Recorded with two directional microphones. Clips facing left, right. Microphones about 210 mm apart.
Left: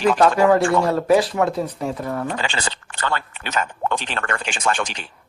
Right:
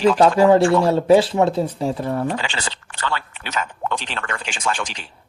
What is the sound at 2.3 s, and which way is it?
Speech, 45° left (ahead or behind).